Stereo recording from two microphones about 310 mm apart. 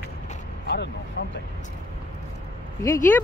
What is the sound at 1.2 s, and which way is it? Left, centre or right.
Vehicle, left.